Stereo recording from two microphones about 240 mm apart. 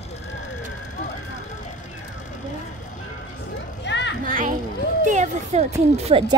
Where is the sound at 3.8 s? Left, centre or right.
Left.